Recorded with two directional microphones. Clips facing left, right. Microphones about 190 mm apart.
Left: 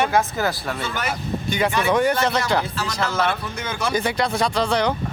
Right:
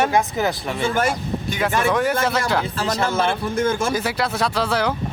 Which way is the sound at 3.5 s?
50° right (ahead or behind).